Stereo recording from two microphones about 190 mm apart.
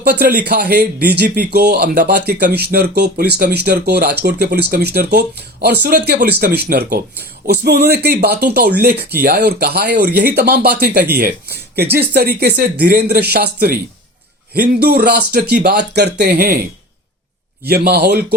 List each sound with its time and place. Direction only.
0.0 s speech: 55° right (ahead or behind)
17.7 s speech: 55° right (ahead or behind)